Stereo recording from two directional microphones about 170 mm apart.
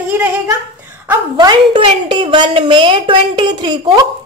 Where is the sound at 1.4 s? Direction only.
25° right (ahead or behind).